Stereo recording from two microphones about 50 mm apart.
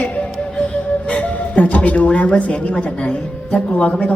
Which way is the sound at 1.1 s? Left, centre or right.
Left.